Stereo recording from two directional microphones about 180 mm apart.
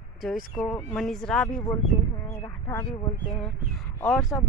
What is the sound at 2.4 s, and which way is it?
Speech, 15° left (ahead or behind).